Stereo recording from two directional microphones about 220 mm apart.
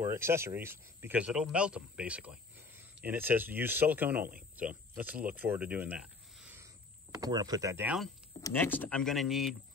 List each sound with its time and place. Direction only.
0.0 s speech: 10° right (ahead or behind)
8.4 s speech: 10° left (ahead or behind)